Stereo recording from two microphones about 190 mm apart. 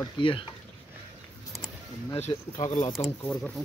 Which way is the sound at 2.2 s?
35° left (ahead or behind).